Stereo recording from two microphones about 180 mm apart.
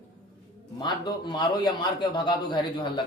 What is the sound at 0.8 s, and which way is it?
A man's voice, 25° left (ahead or behind).